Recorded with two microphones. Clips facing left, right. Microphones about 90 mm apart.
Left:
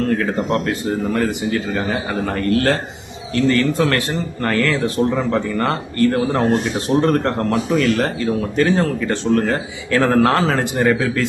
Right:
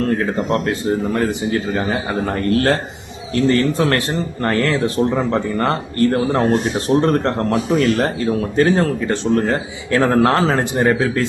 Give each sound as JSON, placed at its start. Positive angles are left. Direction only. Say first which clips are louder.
{"t": 0.1, "sound": "speech", "louder": "even", "side_deg": -30}
{"t": 9.0, "sound": "speech", "louder": "even", "side_deg": -25}